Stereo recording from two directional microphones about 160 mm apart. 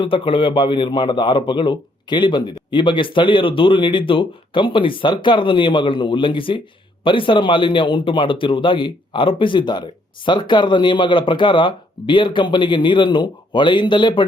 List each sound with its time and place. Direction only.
0.0 s a man's voice: 30° left (ahead or behind)